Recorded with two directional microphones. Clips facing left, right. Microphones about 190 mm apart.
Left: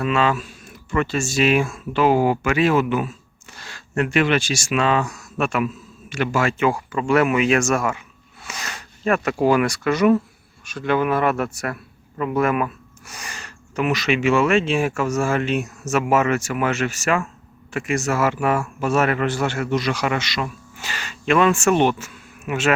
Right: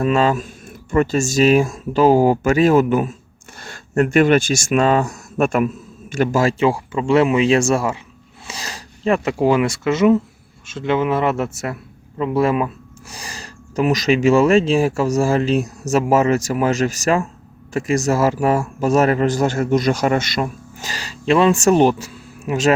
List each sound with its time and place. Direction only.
0.0 s a man's voice: 40° right (ahead or behind)